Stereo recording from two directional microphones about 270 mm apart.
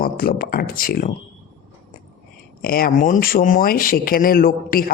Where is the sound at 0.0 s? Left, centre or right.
Left.